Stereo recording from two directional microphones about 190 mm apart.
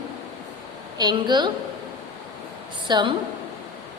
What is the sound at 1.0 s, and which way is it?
Speech, 20° right (ahead or behind).